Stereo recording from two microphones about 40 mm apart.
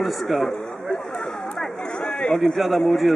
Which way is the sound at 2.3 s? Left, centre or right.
Centre.